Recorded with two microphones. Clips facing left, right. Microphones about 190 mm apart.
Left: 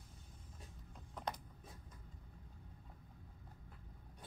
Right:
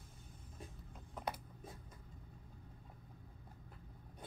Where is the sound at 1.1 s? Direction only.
10° right (ahead or behind).